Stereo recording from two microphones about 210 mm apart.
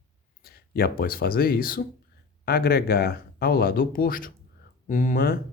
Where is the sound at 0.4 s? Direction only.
45° left (ahead or behind).